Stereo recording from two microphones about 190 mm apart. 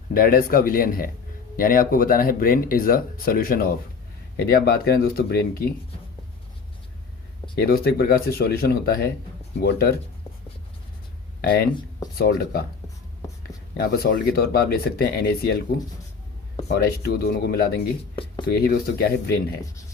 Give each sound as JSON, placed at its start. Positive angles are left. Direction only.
{"t": 0.1, "sound": "speech", "side_deg": 50}
{"t": 7.5, "sound": "speech", "side_deg": 55}
{"t": 11.3, "sound": "speech", "side_deg": 55}
{"t": 13.8, "sound": "speech", "side_deg": 55}
{"t": 16.6, "sound": "speech", "side_deg": 55}